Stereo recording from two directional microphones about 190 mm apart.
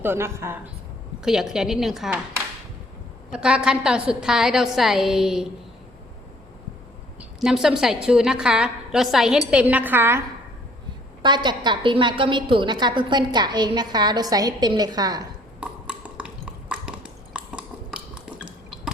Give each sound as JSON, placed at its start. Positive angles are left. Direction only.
{"t": 0.0, "sound": "a woman's voice", "side_deg": -10}
{"t": 3.3, "sound": "a woman's voice", "side_deg": -5}
{"t": 7.2, "sound": "a woman's voice", "side_deg": 0}
{"t": 11.2, "sound": "a woman's voice", "side_deg": -25}
{"t": 15.6, "sound": "a sound", "side_deg": -5}